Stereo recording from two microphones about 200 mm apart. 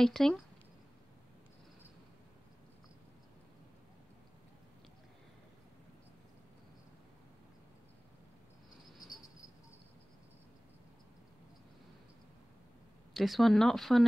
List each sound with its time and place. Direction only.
0.0 s speech: centre (ahead or behind)
13.1 s speech: centre (ahead or behind)